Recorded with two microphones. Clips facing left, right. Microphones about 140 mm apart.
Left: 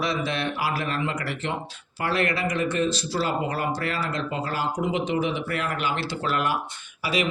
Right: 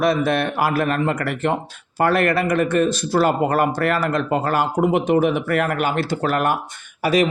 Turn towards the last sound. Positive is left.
turn(degrees=-45)  # may be behind; listen again after turning